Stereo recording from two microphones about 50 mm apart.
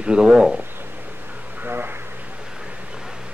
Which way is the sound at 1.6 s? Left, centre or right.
Right.